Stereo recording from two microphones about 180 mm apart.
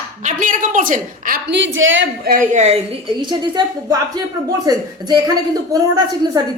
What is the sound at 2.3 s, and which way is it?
Speech, 40° right (ahead or behind).